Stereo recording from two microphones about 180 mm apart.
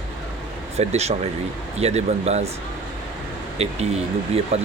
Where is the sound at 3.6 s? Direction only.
35° right (ahead or behind).